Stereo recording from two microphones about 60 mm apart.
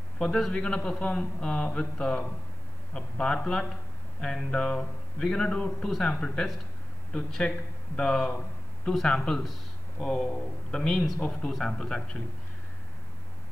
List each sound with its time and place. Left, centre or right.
0.2 s speech: centre
0.5 s speech: centre
7.1 s speech: centre